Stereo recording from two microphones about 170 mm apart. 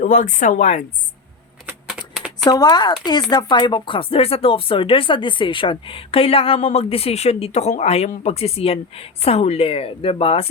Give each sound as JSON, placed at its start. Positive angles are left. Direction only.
{"t": 0.0, "sound": "speech", "side_deg": 45}
{"t": 2.0, "sound": "a sound", "side_deg": -5}
{"t": 2.4, "sound": "speech", "side_deg": 25}